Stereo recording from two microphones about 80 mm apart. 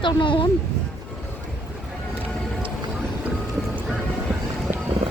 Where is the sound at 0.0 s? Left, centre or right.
Left.